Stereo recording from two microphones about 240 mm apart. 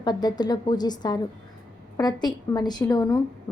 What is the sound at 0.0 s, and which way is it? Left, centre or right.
A woman's voice, centre.